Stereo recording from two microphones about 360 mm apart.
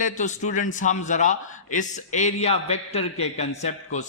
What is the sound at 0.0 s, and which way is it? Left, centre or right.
A man's voice, centre.